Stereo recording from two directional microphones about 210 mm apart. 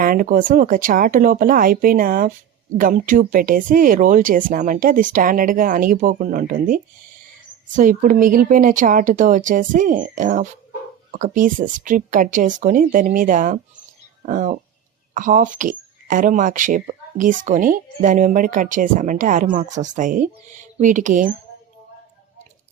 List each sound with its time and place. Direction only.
0.0 s speech: 40° right (ahead or behind)